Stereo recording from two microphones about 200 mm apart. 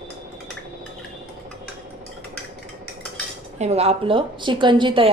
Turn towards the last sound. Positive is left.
turn(degrees=-25)  # may be behind; listen again after turning